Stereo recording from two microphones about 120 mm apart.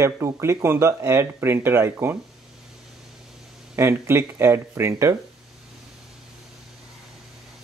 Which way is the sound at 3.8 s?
20° right (ahead or behind).